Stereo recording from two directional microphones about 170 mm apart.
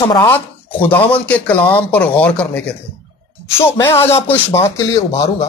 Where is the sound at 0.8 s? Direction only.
10° left (ahead or behind).